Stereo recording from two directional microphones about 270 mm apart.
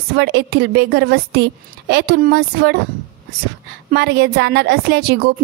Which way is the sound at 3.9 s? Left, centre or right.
Right.